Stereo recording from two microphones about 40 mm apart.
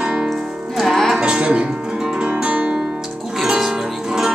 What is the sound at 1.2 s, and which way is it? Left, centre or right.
Music, right.